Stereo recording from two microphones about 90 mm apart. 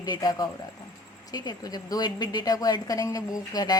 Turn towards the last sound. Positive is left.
turn(degrees=45)  # may be behind; listen again after turning